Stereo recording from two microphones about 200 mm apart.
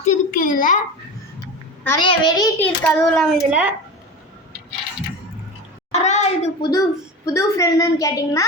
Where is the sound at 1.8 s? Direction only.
20° left (ahead or behind).